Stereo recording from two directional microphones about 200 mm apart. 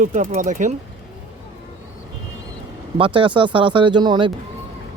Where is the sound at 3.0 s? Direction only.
25° right (ahead or behind).